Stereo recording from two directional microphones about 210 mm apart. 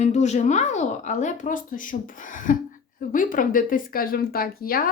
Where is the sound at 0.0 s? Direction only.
35° left (ahead or behind).